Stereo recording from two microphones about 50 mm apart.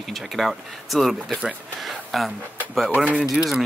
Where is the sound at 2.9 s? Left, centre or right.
Right.